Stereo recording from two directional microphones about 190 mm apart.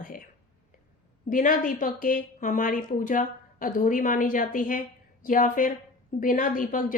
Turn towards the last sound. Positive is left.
turn(degrees=45)  # may be behind; listen again after turning